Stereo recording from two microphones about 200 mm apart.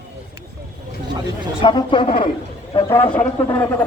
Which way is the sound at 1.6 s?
25° left (ahead or behind).